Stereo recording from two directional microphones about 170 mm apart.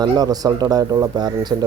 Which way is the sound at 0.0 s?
20° right (ahead or behind).